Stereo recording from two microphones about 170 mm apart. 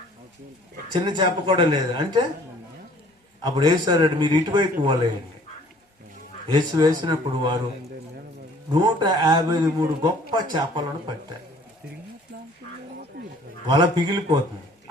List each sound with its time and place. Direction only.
0.9 s a man's voice: 25° right (ahead or behind)
3.4 s a man's voice: 25° right (ahead or behind)
6.5 s a man's voice: 25° right (ahead or behind)
8.7 s a man's voice: 25° right (ahead or behind)
13.1 s a sound: 60° right (ahead or behind)
13.7 s a man's voice: 25° right (ahead or behind)